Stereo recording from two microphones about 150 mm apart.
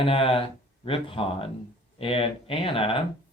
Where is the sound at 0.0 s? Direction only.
40° left (ahead or behind).